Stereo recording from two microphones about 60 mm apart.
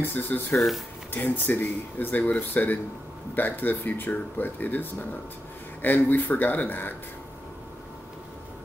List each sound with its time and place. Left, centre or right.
0.0 s speech: left
0.6 s speech: centre
1.1 s speech: left